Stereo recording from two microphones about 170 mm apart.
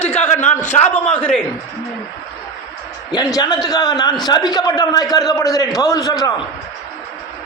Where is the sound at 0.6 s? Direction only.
45° left (ahead or behind).